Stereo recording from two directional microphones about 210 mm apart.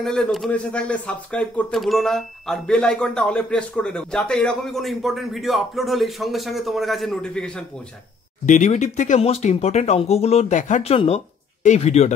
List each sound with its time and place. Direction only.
0.0 s speech: centre (ahead or behind)
8.5 s speech: 35° left (ahead or behind)